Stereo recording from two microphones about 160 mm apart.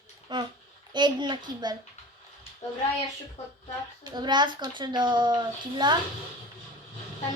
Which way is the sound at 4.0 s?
25° right (ahead or behind).